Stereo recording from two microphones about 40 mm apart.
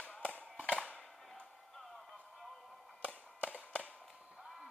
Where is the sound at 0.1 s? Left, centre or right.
Left.